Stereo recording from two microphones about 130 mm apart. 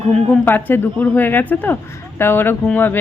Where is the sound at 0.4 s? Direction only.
15° left (ahead or behind).